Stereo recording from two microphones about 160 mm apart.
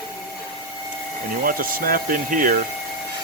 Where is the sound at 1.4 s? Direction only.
60° right (ahead or behind).